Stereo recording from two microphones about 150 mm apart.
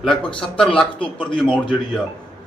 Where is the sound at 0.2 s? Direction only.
35° left (ahead or behind).